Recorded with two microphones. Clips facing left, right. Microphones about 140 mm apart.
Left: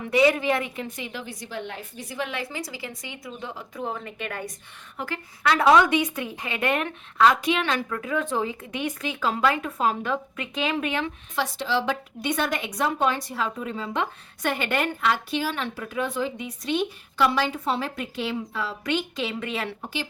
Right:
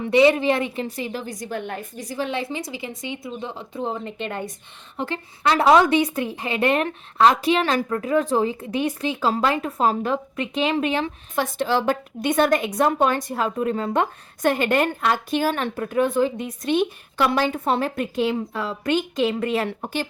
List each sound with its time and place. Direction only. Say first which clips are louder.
0.0 s a woman's voice: right 4 dB; 25° right (ahead or behind)
11.3 s a woman's voice: right 4 dB; 50° right (ahead or behind)